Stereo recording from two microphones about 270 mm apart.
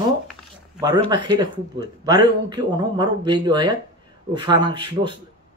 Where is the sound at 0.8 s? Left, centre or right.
Centre.